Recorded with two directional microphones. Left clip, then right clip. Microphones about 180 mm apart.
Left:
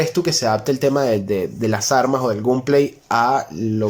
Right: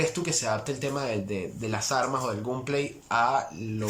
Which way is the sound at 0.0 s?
45° left (ahead or behind).